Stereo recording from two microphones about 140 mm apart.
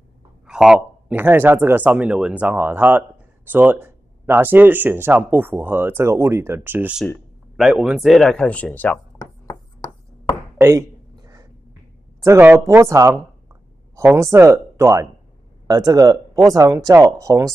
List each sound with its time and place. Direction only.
0.5 s speech: 5° right (ahead or behind)
7.5 s speech: 5° right (ahead or behind)
10.6 s a sound: 20° right (ahead or behind)
12.2 s speech: 15° right (ahead or behind)